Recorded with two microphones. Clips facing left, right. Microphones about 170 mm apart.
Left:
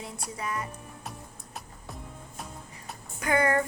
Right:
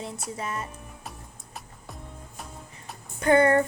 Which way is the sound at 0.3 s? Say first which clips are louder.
Left 1 dB; 25° right (ahead or behind).